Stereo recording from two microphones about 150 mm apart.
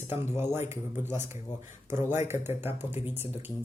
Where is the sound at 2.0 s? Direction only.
15° right (ahead or behind).